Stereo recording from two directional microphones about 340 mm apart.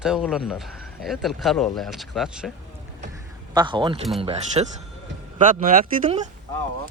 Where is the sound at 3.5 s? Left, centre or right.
Centre.